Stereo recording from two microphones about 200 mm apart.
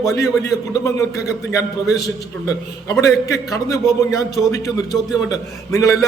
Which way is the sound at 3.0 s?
15° left (ahead or behind).